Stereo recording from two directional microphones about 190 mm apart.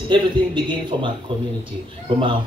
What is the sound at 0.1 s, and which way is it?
Speech, 25° right (ahead or behind).